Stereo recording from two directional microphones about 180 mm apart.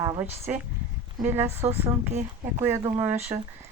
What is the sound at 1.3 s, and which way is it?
Speech, 15° right (ahead or behind).